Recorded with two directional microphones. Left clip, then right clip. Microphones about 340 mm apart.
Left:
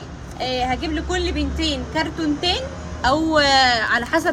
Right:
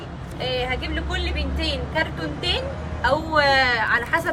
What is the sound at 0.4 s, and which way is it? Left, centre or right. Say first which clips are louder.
A woman's voice: left 3 dB; centre.